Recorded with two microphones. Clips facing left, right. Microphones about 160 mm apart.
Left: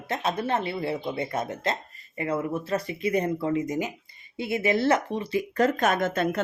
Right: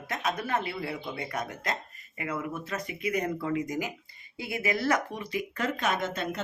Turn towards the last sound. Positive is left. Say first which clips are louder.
# left 6 dB
turn(degrees=50)  # may be behind; listen again after turning